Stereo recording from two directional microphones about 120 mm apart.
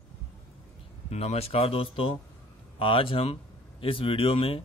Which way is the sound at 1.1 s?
60° left (ahead or behind).